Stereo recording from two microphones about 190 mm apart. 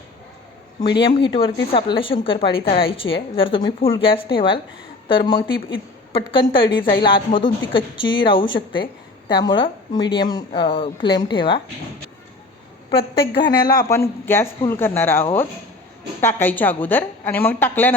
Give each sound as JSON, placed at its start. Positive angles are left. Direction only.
{"t": 1.0, "sound": "a woman's voice", "side_deg": 25}
{"t": 12.9, "sound": "a woman's voice", "side_deg": 30}